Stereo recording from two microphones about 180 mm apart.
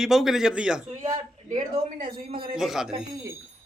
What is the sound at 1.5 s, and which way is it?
Speech, 40° right (ahead or behind).